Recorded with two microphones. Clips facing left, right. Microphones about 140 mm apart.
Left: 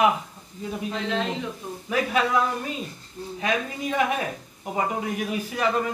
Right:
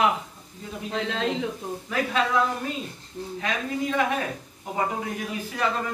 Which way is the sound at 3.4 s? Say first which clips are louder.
Left 1 dB; 15° left (ahead or behind).